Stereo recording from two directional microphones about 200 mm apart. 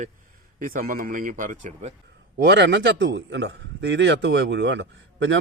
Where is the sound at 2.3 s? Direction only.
60° right (ahead or behind).